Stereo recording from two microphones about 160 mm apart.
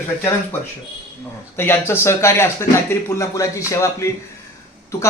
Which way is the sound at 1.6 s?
15° left (ahead or behind).